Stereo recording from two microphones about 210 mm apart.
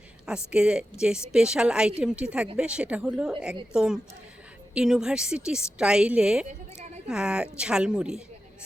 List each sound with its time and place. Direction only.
0.5 s speech: 5° right (ahead or behind)